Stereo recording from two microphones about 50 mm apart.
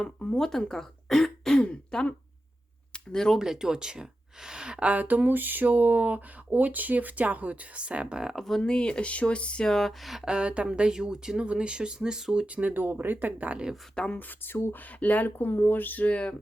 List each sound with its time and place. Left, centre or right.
0.0 s throat clearing: centre
1.6 s speech: centre
2.9 s a sound: centre
3.3 s speech: centre
8.2 s speech: centre
8.4 s speech: centre
8.7 s speech: centre
9.6 s speech: centre
10.2 s speech: right
12.5 s speech: right
12.7 s speech: right
14.1 s speech: left
15.4 s speech: left
15.8 s speech: left